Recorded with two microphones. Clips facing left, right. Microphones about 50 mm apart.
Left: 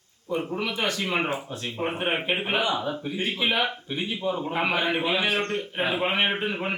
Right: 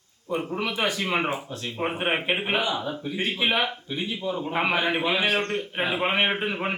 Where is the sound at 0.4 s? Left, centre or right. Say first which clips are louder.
Right 2 dB; centre.